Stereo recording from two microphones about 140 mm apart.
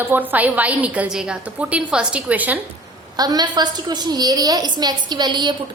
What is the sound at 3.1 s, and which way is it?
A woman's voice, 30° right (ahead or behind).